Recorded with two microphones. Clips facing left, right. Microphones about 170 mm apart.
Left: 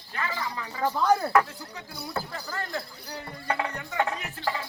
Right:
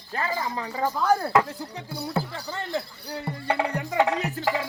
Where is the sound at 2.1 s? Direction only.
25° right (ahead or behind).